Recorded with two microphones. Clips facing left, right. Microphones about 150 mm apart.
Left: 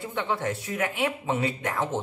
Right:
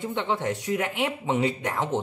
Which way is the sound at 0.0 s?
20° right (ahead or behind).